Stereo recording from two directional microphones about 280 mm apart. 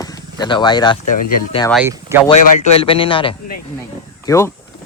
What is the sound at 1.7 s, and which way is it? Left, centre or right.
Speech, centre.